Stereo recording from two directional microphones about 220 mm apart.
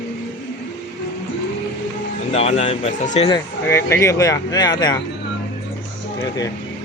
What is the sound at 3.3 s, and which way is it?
Speech, 15° left (ahead or behind).